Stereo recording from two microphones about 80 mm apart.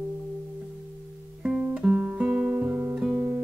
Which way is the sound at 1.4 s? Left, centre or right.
Centre.